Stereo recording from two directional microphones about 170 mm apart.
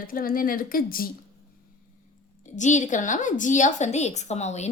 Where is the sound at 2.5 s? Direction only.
45° left (ahead or behind).